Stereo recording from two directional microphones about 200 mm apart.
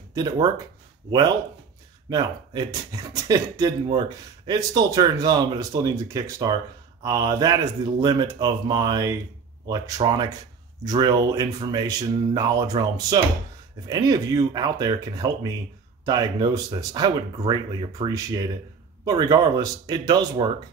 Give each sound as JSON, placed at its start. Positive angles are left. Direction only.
{"t": 0.1, "sound": "speech", "side_deg": -20}
{"t": 2.0, "sound": "speech", "side_deg": -20}